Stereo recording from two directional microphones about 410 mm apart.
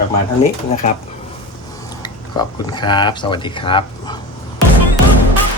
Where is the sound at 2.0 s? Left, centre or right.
Centre.